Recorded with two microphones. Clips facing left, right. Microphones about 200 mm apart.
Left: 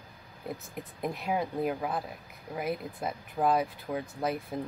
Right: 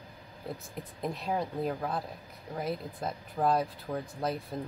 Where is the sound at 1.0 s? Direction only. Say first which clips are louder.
Left 1 dB; 5° left (ahead or behind).